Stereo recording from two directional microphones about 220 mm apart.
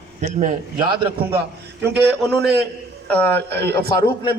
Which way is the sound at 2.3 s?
50° right (ahead or behind).